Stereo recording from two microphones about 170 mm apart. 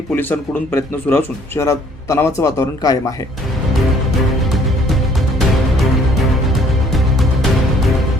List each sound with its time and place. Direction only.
0.1 s speech: 10° left (ahead or behind)